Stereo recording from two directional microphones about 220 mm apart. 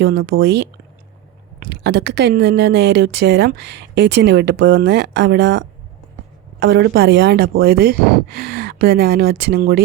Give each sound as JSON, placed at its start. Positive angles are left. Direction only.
{"t": 0.0, "sound": "a woman's voice", "side_deg": -45}
{"t": 1.5, "sound": "a woman's voice", "side_deg": -50}